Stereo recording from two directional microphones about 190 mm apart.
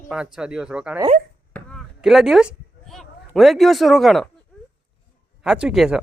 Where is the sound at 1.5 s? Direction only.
5° left (ahead or behind).